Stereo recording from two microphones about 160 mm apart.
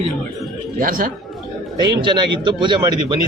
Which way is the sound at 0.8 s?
60° right (ahead or behind).